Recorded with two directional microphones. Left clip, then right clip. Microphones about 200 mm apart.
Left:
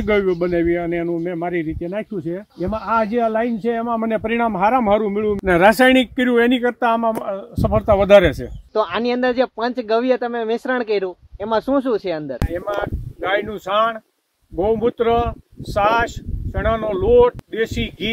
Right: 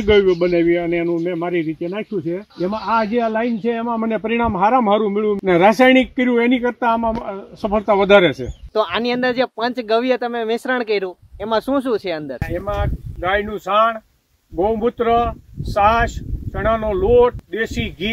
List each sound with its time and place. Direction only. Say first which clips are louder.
0.0 s speech: right 4 dB; 10° left (ahead or behind)
8.7 s speech: right 1 dB; 5° right (ahead or behind)
14.6 s speech: even; 15° left (ahead or behind)